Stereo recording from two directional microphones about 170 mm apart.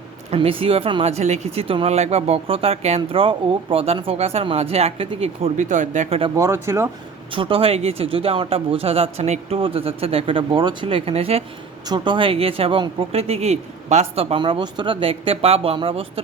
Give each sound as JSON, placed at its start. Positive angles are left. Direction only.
{"t": 0.3, "sound": "speech", "side_deg": -35}
{"t": 6.3, "sound": "speech", "side_deg": -15}
{"t": 7.3, "sound": "speech", "side_deg": -30}